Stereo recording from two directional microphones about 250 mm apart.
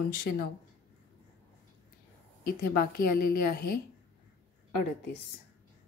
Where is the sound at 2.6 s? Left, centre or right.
Left.